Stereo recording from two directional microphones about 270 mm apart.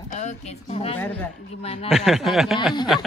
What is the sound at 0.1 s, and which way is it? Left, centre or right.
Speech, left.